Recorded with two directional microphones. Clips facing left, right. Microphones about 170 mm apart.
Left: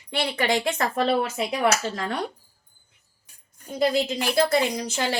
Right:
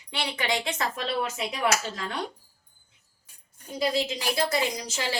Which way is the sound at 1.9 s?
45° left (ahead or behind).